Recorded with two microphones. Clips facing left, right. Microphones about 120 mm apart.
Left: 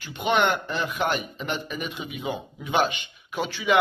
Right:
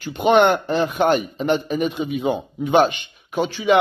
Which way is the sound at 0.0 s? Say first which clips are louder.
Right 8 dB; 35° right (ahead or behind).